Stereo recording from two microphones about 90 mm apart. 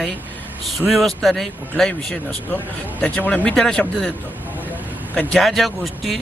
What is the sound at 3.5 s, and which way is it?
Speech, 5° left (ahead or behind).